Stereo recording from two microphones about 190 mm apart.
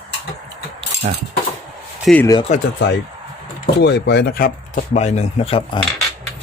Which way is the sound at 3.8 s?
65° left (ahead or behind).